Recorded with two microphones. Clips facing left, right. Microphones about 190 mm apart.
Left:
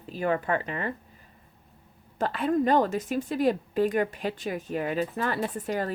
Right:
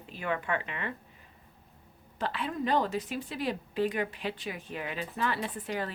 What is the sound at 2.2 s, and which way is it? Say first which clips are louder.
Speech: left 8 dB; 45° left (ahead or behind).